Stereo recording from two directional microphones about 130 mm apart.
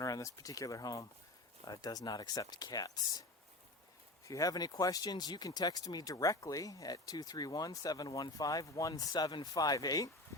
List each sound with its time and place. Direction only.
0.0 s speech: 25° left (ahead or behind)
4.3 s speech: 25° left (ahead or behind)